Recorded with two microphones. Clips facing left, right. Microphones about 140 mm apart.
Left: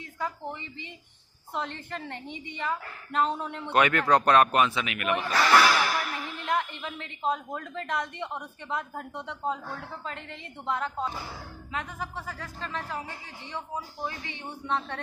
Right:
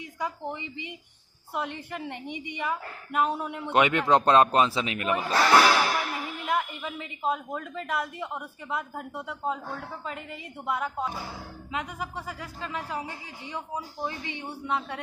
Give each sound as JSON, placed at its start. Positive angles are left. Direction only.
{"t": 0.2, "sound": "a woman's voice", "side_deg": -15}
{"t": 6.4, "sound": "a woman's voice", "side_deg": -5}